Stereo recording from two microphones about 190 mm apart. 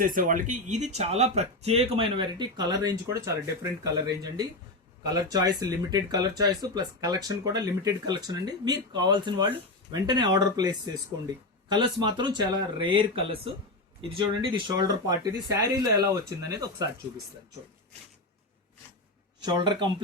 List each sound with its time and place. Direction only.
0.0 s speech: 45° right (ahead or behind); by 16.9 s 20° right (ahead or behind)
19.4 s speech: 25° right (ahead or behind)